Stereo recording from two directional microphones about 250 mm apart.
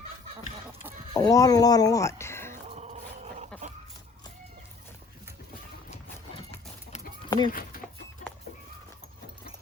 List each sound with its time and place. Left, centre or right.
1.1 s speech: centre
2.6 s dog: right
6.3 s a sound: left